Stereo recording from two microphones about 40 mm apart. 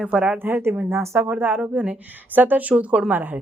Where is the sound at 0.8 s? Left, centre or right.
Right.